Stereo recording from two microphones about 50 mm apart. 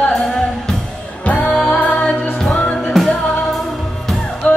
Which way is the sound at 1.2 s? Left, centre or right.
Left.